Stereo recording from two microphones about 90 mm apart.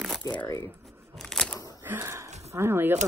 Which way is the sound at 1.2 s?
5° left (ahead or behind).